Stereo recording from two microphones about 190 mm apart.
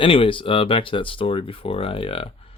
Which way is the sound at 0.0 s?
25° left (ahead or behind).